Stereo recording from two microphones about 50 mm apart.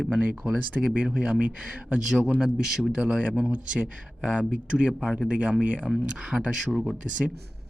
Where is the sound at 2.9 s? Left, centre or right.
Right.